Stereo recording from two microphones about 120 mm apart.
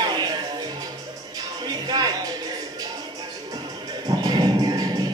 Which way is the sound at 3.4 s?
35° right (ahead or behind).